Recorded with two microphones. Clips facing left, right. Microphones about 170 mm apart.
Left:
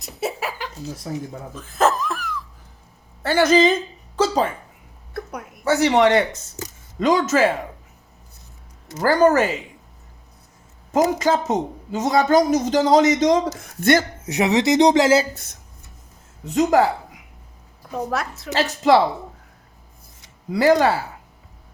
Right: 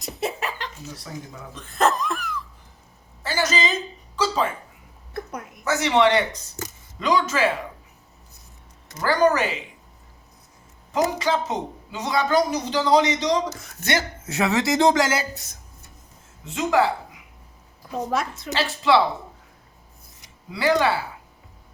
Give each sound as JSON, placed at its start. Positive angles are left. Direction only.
{"t": 0.0, "sound": "chuckle", "side_deg": 5}
{"t": 0.9, "sound": "speech", "side_deg": 35}
{"t": 1.5, "sound": "laughter", "side_deg": 5}
{"t": 3.2, "sound": "a woman's voice", "side_deg": 60}
{"t": 5.6, "sound": "a woman's voice", "side_deg": 35}
{"t": 9.0, "sound": "a woman's voice", "side_deg": 45}
{"t": 10.9, "sound": "a woman's voice", "side_deg": 45}
{"t": 14.3, "sound": "speech", "side_deg": 20}
{"t": 16.5, "sound": "speech", "side_deg": 40}
{"t": 18.1, "sound": "a woman's voice", "side_deg": 0}
{"t": 18.5, "sound": "a woman's voice", "side_deg": 45}
{"t": 20.5, "sound": "a woman's voice", "side_deg": 45}